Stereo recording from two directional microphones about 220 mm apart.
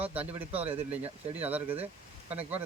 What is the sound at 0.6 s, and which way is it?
Speech, 25° right (ahead or behind).